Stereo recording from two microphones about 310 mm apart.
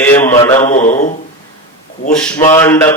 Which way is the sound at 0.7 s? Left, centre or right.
Left.